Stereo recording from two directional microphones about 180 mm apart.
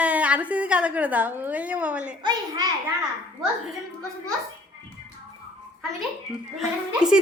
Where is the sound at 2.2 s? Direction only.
25° right (ahead or behind).